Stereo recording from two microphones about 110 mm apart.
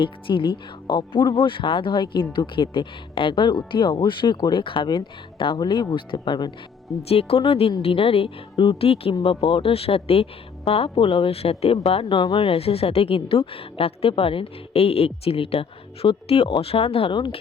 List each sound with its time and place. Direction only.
0.0 s speech: 50° left (ahead or behind)
7.1 s speech: 65° left (ahead or behind); by 17.4 s 45° left (ahead or behind)